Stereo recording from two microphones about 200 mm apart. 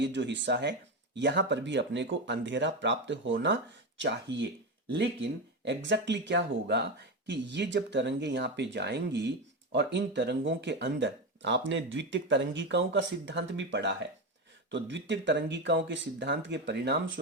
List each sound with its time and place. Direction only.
0.0 s speech: 60° right (ahead or behind)